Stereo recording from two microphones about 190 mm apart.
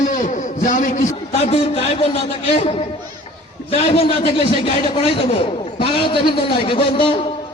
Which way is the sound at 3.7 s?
30° left (ahead or behind).